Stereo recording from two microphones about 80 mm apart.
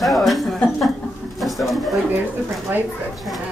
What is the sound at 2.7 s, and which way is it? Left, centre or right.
Speech, right.